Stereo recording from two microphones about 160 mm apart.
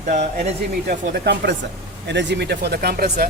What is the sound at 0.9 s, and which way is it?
Speech, 85° right.